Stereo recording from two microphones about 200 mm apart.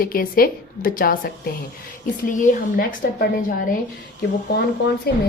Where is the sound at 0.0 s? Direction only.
45° left (ahead or behind).